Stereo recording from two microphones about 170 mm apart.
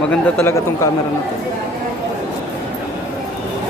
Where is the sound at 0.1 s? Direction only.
15° left (ahead or behind).